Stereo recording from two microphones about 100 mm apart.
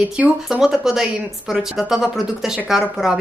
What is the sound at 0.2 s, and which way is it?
A woman's voice, 5° right (ahead or behind).